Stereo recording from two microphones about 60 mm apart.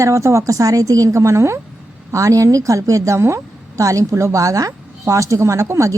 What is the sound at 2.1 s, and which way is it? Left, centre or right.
A woman's voice, right.